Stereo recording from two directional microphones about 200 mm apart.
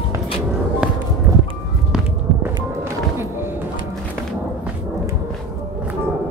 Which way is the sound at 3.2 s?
10° right (ahead or behind).